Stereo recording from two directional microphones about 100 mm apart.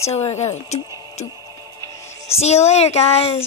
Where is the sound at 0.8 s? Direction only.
35° right (ahead or behind).